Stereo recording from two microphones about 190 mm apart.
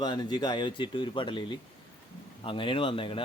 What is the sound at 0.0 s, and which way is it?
Speech, 25° left (ahead or behind).